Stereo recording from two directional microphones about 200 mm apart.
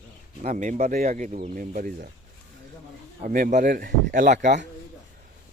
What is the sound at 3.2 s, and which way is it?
Speech, 40° right (ahead or behind).